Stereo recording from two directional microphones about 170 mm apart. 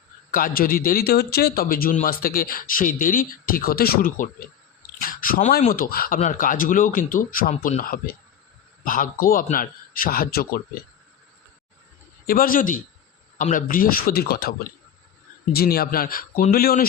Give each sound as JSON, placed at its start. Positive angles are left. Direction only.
{"t": 0.3, "sound": "a man's voice", "side_deg": 55}
{"t": 12.2, "sound": "a man's voice", "side_deg": 55}
{"t": 15.5, "sound": "a man's voice", "side_deg": 60}